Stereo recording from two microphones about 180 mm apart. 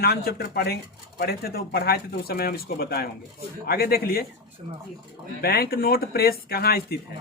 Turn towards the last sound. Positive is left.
turn(degrees=60)  # may be behind; listen again after turning